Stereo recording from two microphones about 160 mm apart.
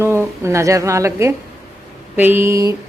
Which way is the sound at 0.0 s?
15° right (ahead or behind).